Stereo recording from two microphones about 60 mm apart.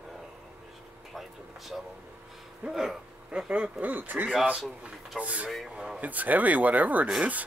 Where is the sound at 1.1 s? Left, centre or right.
Centre.